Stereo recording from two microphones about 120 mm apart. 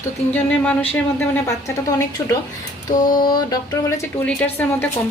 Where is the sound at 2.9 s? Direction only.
35° left (ahead or behind).